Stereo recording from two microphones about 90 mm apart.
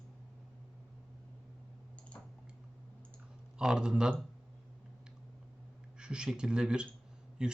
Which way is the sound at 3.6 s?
10° right (ahead or behind).